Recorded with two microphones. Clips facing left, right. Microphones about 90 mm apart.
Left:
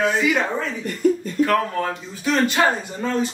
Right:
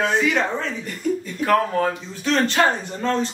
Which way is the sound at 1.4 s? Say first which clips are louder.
Left 2 dB; 40° left (ahead or behind).